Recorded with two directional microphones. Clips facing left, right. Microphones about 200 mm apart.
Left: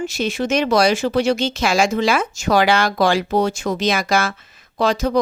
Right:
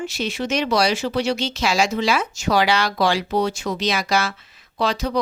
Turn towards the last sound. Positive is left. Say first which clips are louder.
# left 4 dB
turn(degrees=45)  # may be behind; listen again after turning